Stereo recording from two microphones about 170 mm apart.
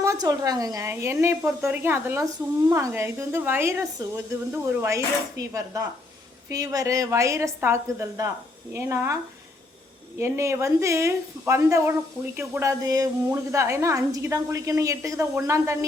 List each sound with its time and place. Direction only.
0.0 s a woman's voice: 20° right (ahead or behind)
10.2 s a woman's voice: 15° right (ahead or behind)